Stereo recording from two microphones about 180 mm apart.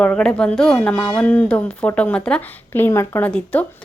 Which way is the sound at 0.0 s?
5° left (ahead or behind).